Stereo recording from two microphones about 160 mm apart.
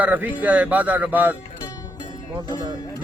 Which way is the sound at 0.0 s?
10° right (ahead or behind).